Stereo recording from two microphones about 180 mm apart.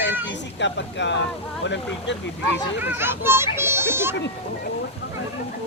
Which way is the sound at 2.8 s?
10° right (ahead or behind).